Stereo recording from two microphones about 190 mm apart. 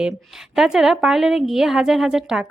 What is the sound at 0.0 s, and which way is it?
A woman's voice, centre (ahead or behind).